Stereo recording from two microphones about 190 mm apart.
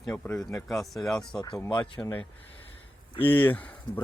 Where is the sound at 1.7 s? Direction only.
5° left (ahead or behind).